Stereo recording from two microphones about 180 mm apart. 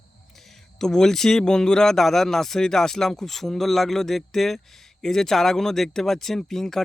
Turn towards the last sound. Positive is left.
turn(degrees=0)  # may be behind; listen again after turning